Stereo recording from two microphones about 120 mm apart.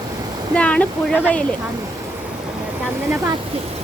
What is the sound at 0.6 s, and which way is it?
Speech, 10° left (ahead or behind).